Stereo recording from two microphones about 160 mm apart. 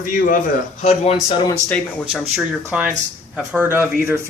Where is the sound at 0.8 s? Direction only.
45° left (ahead or behind).